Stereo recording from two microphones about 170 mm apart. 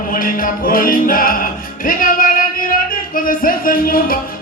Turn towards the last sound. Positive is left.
turn(degrees=55)  # may be behind; listen again after turning